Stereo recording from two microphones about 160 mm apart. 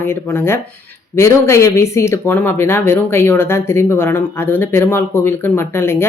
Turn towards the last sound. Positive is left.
turn(degrees=15)  # may be behind; listen again after turning